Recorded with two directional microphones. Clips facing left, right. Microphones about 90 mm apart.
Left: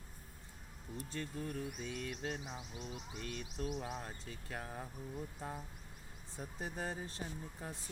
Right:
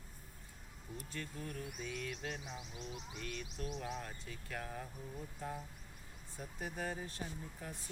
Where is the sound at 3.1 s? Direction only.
30° left (ahead or behind).